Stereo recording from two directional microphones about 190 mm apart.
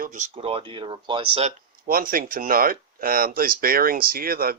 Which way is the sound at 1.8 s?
50° right (ahead or behind).